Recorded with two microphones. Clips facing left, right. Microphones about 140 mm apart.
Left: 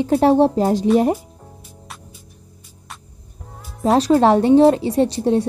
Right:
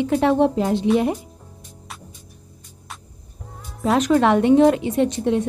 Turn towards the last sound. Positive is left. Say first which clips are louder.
# left 2 dB
turn(degrees=35)  # may be behind; listen again after turning